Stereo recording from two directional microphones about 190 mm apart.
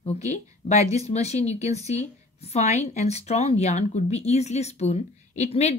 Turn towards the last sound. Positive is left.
turn(degrees=35)  # may be behind; listen again after turning